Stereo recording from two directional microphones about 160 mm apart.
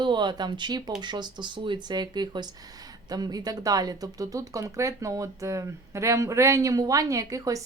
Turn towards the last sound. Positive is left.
turn(degrees=-20)  # may be behind; listen again after turning